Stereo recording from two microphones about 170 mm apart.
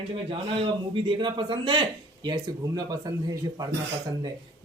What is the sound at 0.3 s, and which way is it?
A man's voice, 30° right (ahead or behind).